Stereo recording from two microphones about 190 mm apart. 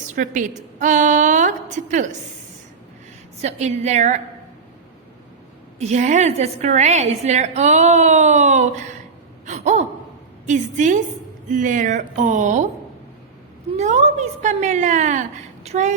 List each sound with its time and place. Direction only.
0.1 s a woman's voice: 40° right (ahead or behind)
3.4 s a woman's voice: 35° right (ahead or behind)
5.8 s a woman's voice: 40° right (ahead or behind)
9.5 s gasp: 35° right (ahead or behind)
10.4 s a woman's voice: 40° right (ahead or behind)
13.7 s a woman's voice: 35° right (ahead or behind)